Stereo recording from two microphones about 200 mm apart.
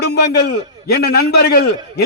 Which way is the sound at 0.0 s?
55° left (ahead or behind).